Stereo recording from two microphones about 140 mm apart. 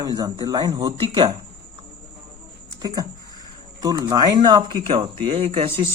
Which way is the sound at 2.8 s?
25° right (ahead or behind).